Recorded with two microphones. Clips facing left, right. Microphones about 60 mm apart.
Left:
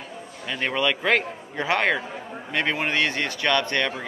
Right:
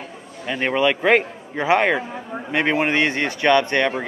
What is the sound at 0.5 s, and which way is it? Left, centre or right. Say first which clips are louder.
A man's voice: right 5 dB; centre.